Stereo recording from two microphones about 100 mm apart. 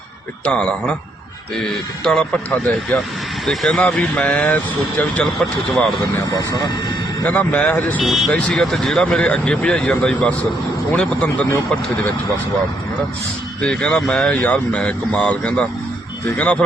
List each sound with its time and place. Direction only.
0.4 s a man's voice: 10° left (ahead or behind)
6.3 s speech: 45° left (ahead or behind)
7.3 s speech: 15° left (ahead or behind)
13.6 s speech: 10° left (ahead or behind)